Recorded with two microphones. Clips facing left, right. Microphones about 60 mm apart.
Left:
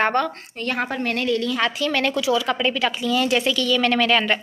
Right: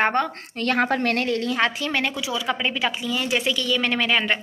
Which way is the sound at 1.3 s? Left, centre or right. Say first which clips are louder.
Left 1 dB; right.